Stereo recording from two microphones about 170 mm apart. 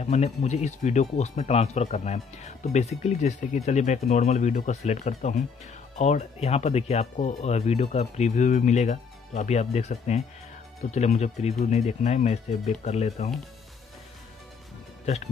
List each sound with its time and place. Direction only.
0.0 s speech: 40° left (ahead or behind)